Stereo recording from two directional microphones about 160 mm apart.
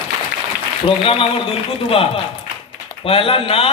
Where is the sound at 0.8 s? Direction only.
35° left (ahead or behind).